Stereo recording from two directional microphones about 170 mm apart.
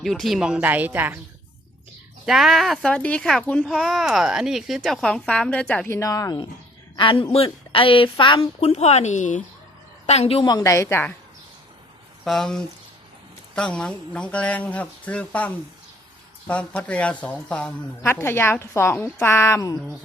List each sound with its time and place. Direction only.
0.0 s speech: centre (ahead or behind)
2.2 s speech: centre (ahead or behind)
6.0 s a woman's voice: 20° left (ahead or behind); by 10.4 s 35° left (ahead or behind)
10.4 s a woman's voice: 20° left (ahead or behind)
12.2 s a woman's voice: centre (ahead or behind)